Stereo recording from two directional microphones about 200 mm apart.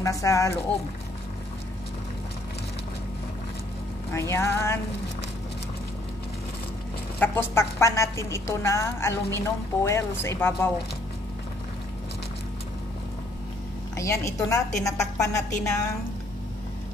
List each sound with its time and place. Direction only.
0.0 s a woman's voice: 15° left (ahead or behind)
4.1 s a woman's voice: 15° left (ahead or behind)
7.2 s a woman's voice: 10° left (ahead or behind)
13.9 s a woman's voice: 15° left (ahead or behind)